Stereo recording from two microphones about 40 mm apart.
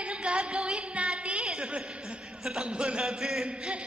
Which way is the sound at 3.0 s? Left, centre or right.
Centre.